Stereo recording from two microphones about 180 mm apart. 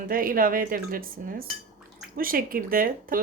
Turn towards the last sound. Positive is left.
turn(degrees=-50)  # may be behind; listen again after turning